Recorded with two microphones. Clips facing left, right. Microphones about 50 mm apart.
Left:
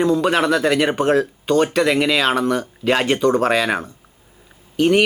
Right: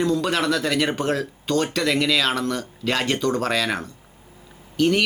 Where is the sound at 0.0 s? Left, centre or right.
Centre.